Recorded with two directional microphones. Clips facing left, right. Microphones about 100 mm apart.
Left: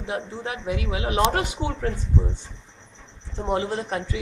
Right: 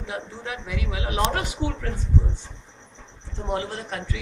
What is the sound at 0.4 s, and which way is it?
Speech, 35° left (ahead or behind).